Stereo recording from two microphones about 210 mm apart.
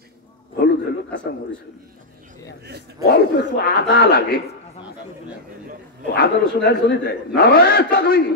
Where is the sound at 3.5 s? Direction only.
55° left (ahead or behind).